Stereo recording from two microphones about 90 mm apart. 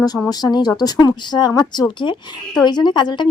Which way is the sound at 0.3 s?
50° left (ahead or behind).